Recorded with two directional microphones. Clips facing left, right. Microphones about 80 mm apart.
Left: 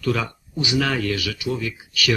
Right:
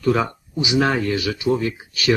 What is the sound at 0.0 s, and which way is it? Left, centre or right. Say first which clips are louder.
Speech: right 5 dB; right.